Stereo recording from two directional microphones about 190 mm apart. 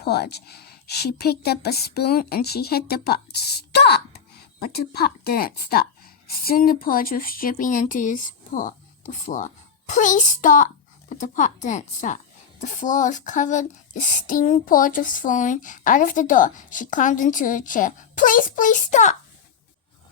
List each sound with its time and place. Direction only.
0.0 s a woman's voice: 60° left (ahead or behind); by 19.1 s 40° left (ahead or behind)